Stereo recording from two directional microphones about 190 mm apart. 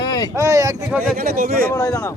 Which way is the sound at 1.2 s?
50° right (ahead or behind).